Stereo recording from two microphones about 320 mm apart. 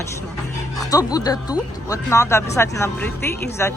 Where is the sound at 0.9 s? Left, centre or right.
Centre.